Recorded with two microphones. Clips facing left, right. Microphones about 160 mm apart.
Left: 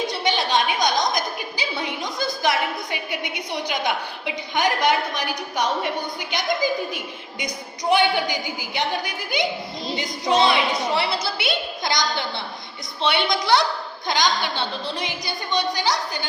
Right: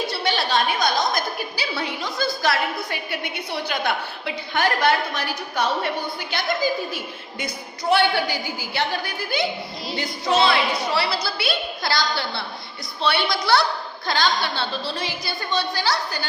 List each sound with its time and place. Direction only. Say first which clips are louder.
0.1 s a woman's voice: left 1 dB; 20° left (ahead or behind)